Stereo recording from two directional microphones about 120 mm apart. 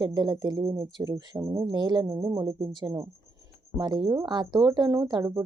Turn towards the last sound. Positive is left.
turn(degrees=-30)  # may be behind; listen again after turning